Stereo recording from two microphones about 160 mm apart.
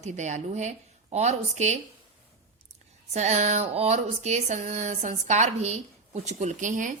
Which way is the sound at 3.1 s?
45° right (ahead or behind).